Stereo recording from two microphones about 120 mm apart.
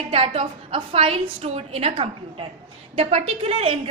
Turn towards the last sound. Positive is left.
turn(degrees=-55)  # may be behind; listen again after turning